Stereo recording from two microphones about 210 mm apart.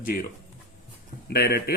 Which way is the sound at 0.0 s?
45° left (ahead or behind).